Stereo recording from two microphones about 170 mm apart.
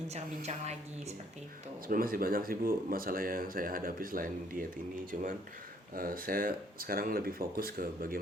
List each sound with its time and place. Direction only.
0.1 s a woman's voice: 40° right (ahead or behind)
1.9 s speech: 60° right (ahead or behind)